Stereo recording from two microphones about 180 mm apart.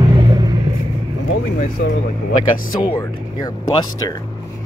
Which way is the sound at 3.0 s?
20° left (ahead or behind).